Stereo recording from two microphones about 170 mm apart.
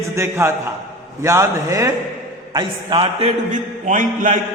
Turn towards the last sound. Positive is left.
turn(degrees=-50)  # may be behind; listen again after turning